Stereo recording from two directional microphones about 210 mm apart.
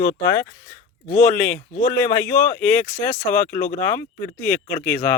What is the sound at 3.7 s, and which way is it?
Speech, 10° left (ahead or behind).